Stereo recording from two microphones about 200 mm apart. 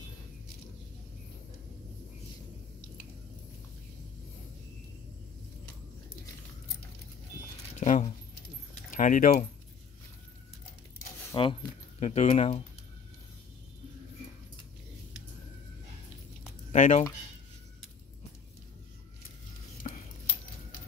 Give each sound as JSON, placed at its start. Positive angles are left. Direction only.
{"t": 7.8, "sound": "speech", "side_deg": 35}
{"t": 11.3, "sound": "speech", "side_deg": 25}
{"t": 16.7, "sound": "speech", "side_deg": 35}